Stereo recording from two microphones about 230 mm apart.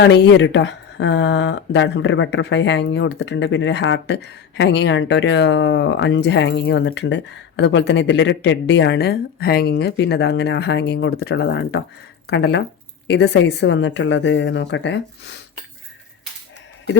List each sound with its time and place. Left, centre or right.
0.0 s speech: left